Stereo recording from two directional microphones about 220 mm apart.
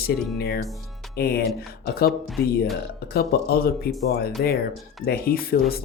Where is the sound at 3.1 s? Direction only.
45° left (ahead or behind).